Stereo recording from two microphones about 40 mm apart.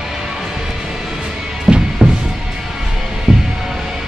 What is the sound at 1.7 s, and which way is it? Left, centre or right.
Music, centre.